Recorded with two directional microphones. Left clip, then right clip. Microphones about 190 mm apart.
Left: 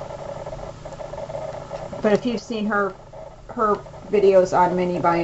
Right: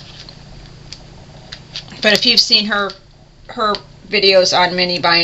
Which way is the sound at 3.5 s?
25° right (ahead or behind).